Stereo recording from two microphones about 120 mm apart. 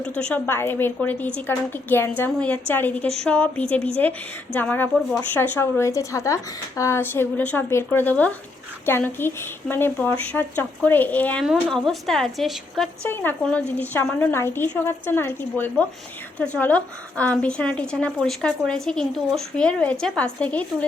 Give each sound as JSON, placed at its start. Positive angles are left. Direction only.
{"t": 0.3, "sound": "a woman's voice", "side_deg": 15}
{"t": 11.4, "sound": "a woman's voice", "side_deg": 0}
{"t": 13.1, "sound": "a woman's voice", "side_deg": 15}